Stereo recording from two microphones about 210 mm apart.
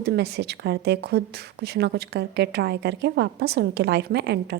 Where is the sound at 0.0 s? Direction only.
50° right (ahead or behind).